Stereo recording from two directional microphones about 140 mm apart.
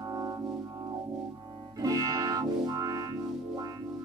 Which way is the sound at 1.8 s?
25° right (ahead or behind).